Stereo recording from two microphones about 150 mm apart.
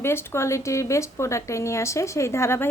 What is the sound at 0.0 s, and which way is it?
A woman's voice, 15° left (ahead or behind).